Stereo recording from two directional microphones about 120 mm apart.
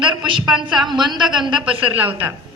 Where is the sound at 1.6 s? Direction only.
10° right (ahead or behind).